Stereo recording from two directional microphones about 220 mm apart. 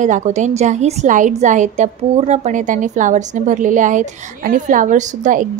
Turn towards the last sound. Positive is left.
turn(degrees=-35)  # may be behind; listen again after turning